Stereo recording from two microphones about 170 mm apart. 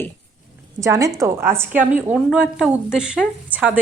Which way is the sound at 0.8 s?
20° right (ahead or behind).